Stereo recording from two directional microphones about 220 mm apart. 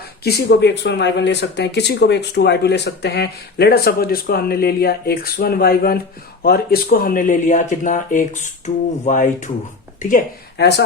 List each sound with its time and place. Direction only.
0.3 s speech: 45° left (ahead or behind)